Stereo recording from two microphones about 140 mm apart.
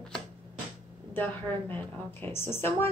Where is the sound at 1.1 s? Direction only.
15° left (ahead or behind).